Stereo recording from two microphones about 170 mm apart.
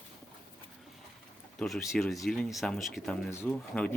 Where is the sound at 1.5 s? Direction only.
Centre (ahead or behind).